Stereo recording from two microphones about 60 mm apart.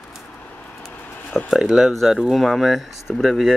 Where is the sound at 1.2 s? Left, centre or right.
Left.